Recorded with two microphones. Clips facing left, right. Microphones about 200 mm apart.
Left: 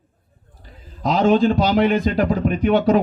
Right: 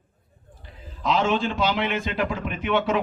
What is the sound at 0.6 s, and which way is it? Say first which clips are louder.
A man's voice: left 5 dB; 40° left (ahead or behind).